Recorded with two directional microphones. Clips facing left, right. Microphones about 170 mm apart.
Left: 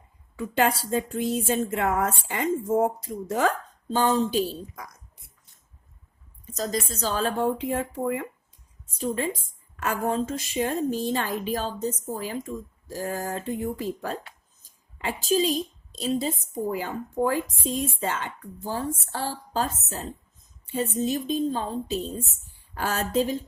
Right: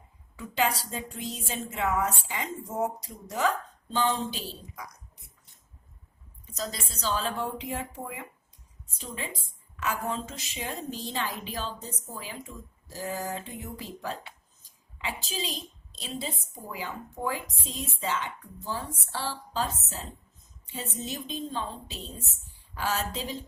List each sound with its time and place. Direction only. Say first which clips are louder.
0.3 s a woman's voice: left 5 dB; 50° left (ahead or behind)
6.4 s a woman's voice: left 8 dB; 45° left (ahead or behind)